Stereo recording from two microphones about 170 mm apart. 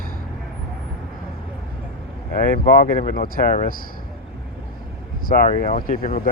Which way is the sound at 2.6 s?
50° left (ahead or behind).